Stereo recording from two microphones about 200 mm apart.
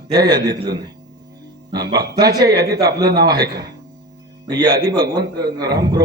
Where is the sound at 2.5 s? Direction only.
50° right (ahead or behind).